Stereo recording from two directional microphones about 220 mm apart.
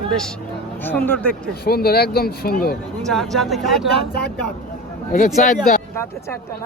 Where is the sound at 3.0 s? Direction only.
Centre (ahead or behind).